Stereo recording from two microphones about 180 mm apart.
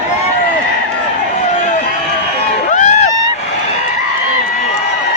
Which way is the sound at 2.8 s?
40° left (ahead or behind).